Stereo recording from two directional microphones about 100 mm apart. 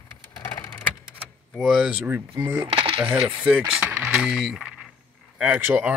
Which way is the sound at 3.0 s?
10° right (ahead or behind).